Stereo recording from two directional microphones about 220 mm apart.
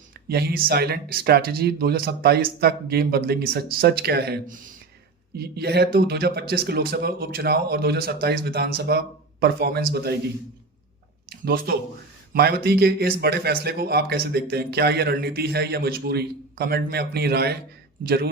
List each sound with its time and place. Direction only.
0.3 s speech: 45° right (ahead or behind)
11.4 s speech: 45° right (ahead or behind)